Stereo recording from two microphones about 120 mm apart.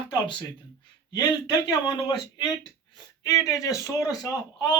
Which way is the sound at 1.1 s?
35° left (ahead or behind).